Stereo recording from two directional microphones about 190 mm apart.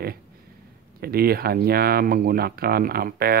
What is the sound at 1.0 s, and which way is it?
Speech, 55° right (ahead or behind).